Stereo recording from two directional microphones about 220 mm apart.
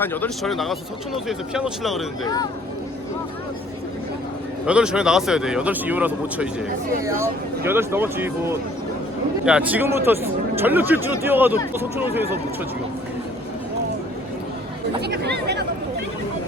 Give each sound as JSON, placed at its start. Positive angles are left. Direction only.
{"t": 0.0, "sound": "speech", "side_deg": 10}
{"t": 4.6, "sound": "speech", "side_deg": -5}
{"t": 15.0, "sound": "speech", "side_deg": -50}